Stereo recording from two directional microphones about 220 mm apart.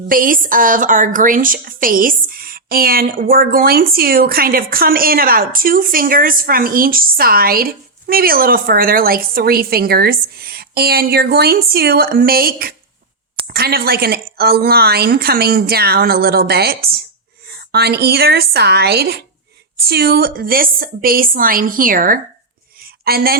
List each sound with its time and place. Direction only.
0.1 s a woman's voice: 40° right (ahead or behind)